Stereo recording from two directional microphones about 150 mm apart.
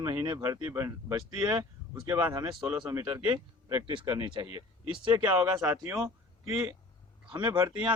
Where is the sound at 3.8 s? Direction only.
35° right (ahead or behind).